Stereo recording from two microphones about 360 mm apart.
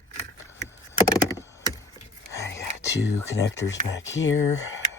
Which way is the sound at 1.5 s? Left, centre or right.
Centre.